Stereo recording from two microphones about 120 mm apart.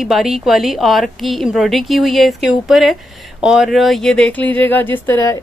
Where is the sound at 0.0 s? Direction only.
Centre (ahead or behind).